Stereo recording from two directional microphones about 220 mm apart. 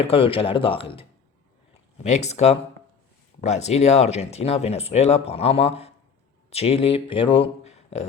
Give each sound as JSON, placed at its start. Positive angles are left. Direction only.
{"t": 0.0, "sound": "speech", "side_deg": 25}
{"t": 2.0, "sound": "speech", "side_deg": 30}